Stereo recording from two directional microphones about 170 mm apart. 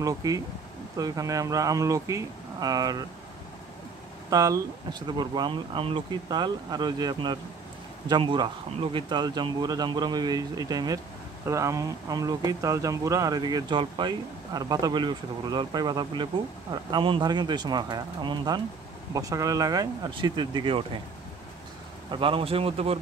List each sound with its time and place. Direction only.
0.0 s speech: 20° right (ahead or behind)
4.3 s speech: 20° right (ahead or behind)
22.1 s speech: 30° right (ahead or behind)